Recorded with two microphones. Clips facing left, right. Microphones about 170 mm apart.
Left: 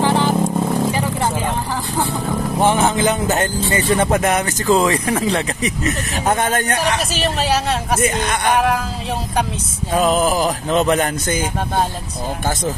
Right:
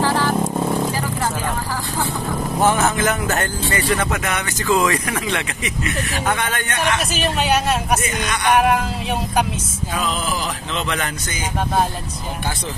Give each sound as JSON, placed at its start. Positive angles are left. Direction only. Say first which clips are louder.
{"t": 0.0, "sound": "vehicle", "louder": "left 3 dB", "side_deg": 20}
{"t": 2.6, "sound": "speech", "louder": "left 2 dB", "side_deg": 25}
{"t": 4.2, "sound": "speech", "louder": "left 6 dB", "side_deg": 40}
{"t": 9.9, "sound": "speech", "louder": "left 9 dB", "side_deg": 45}